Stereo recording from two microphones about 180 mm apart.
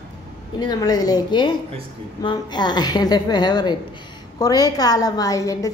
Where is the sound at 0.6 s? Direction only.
20° left (ahead or behind).